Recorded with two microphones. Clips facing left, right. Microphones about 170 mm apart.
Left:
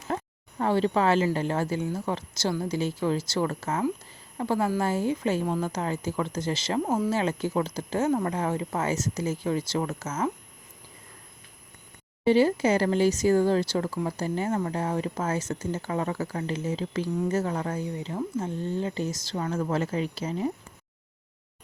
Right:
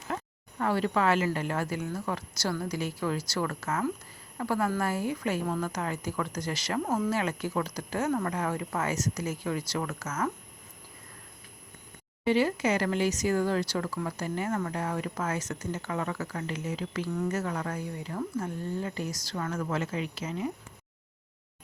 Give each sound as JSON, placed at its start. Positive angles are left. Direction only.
{"t": 0.1, "sound": "a sound", "side_deg": 30}
{"t": 0.6, "sound": "speech", "side_deg": 25}
{"t": 12.2, "sound": "speech", "side_deg": 30}